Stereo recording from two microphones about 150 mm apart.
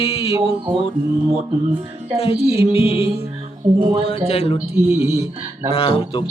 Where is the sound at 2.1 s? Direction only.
40° left (ahead or behind).